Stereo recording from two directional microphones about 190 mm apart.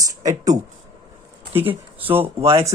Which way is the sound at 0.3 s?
20° right (ahead or behind).